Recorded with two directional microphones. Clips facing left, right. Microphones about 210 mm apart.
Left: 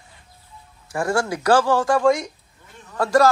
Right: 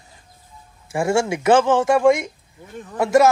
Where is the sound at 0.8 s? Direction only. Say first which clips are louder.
Right 3 dB; 25° right (ahead or behind).